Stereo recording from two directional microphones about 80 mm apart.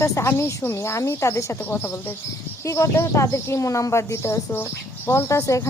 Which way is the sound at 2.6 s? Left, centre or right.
Left.